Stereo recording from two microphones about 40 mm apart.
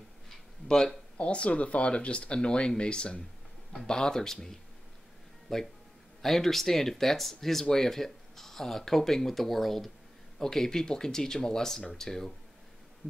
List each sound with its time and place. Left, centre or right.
0.7 s speech: centre
1.1 s speech: left; by 12.4 s centre